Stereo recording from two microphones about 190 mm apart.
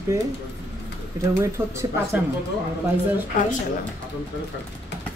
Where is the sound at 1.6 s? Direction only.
10° right (ahead or behind).